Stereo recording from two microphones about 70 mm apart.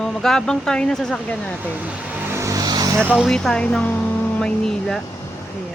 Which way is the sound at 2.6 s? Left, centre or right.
Right.